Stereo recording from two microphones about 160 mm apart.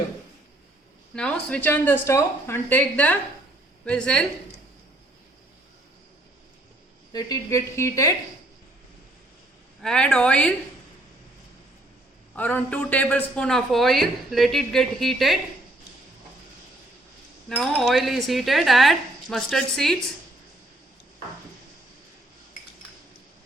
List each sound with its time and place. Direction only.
1.1 s a man's voice: 5° left (ahead or behind)
7.1 s a woman's voice: 25° left (ahead or behind)
9.8 s speech: 5° left (ahead or behind)
12.4 s a man's voice: 10° left (ahead or behind)
17.5 s a man's voice: centre (ahead or behind)